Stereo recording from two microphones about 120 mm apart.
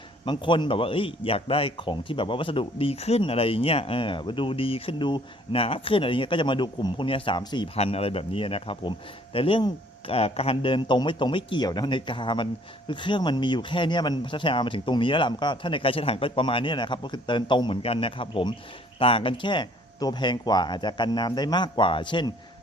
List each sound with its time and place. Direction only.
0.3 s a man's voice: 40° left (ahead or behind)
7.8 s a man's voice: 55° left (ahead or behind)